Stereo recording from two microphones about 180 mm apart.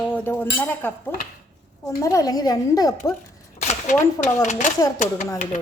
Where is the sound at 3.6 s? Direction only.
40° left (ahead or behind).